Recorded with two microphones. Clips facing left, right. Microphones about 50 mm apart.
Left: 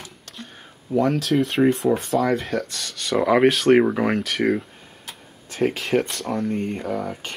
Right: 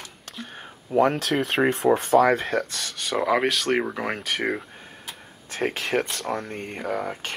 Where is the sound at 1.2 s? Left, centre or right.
Right.